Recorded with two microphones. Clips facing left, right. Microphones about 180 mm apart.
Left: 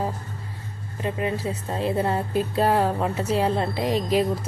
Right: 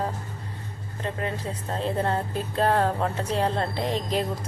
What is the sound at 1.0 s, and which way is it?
A woman's voice, 10° left (ahead or behind).